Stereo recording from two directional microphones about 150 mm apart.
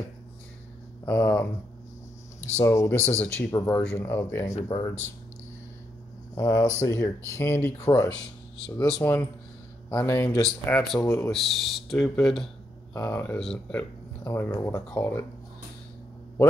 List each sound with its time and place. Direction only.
1.0 s speech: 20° left (ahead or behind)
6.3 s speech: 25° left (ahead or behind)
11.2 s speech: centre (ahead or behind)
13.1 s speech: 15° left (ahead or behind)